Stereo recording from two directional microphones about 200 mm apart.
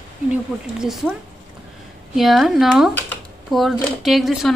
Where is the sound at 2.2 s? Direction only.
Centre (ahead or behind).